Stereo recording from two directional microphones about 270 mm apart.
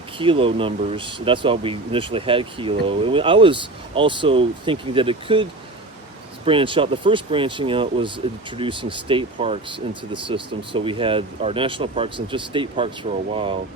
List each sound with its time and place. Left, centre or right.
0.2 s speech: centre